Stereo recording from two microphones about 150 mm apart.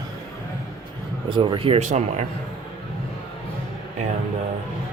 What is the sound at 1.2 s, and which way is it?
Speech, 35° right (ahead or behind).